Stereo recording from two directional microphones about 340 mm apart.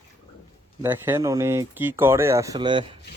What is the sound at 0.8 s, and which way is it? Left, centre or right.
Speech, centre.